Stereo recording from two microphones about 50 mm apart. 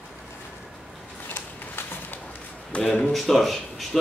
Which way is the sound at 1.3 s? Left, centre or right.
Left.